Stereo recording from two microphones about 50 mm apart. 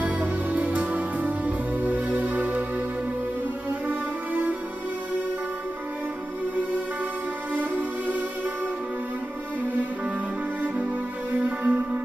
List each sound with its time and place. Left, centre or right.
0.0 s music: right
3.8 s music: right
11.3 s music: right